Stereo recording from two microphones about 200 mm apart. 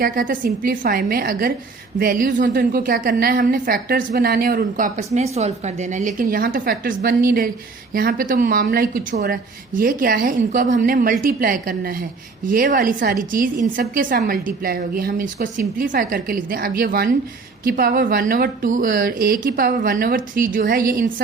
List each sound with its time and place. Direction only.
0.0 s a woman's voice: 45° right (ahead or behind)